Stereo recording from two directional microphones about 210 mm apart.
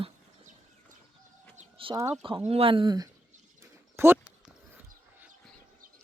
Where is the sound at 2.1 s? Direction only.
30° right (ahead or behind).